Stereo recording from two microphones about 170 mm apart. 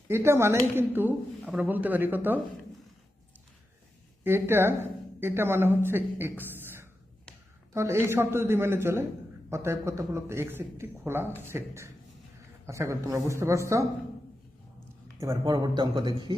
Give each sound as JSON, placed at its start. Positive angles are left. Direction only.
{"t": 0.1, "sound": "speech", "side_deg": -15}
{"t": 4.2, "sound": "speech", "side_deg": -15}
{"t": 15.2, "sound": "speech", "side_deg": -20}